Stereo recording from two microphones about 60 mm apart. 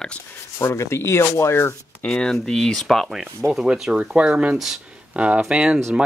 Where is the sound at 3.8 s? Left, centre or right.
Centre.